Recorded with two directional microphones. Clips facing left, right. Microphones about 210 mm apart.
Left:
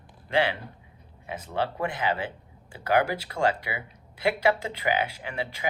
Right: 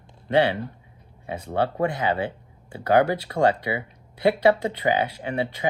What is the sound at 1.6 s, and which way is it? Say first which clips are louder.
Speech: right 4 dB; 25° right (ahead or behind).